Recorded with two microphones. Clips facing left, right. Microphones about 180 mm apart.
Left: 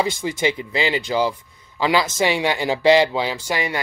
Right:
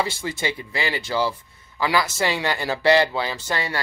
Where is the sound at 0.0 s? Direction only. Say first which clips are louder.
Left 4 dB; 15° left (ahead or behind).